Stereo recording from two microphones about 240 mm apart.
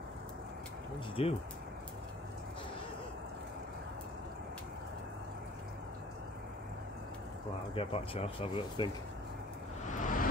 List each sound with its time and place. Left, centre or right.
1.2 s speech: left
7.7 s speech: left
9.8 s vehicle: left